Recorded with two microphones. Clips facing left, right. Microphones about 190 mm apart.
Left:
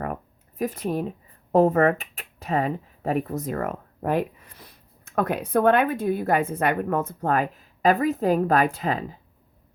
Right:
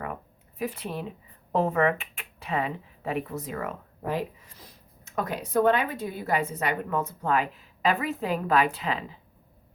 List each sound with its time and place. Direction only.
0.6 s speech: 45° left (ahead or behind)